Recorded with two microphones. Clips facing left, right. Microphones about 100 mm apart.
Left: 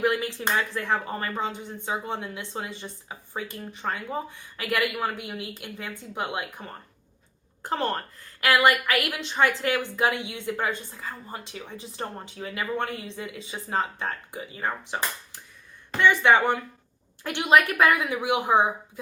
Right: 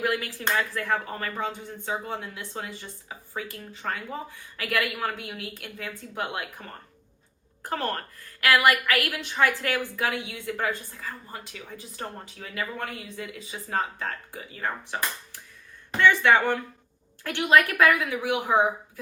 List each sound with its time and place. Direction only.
0.0 s a woman's voice: 20° left (ahead or behind)